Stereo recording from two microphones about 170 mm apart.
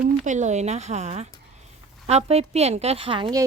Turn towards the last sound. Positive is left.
turn(degrees=-30)  # may be behind; listen again after turning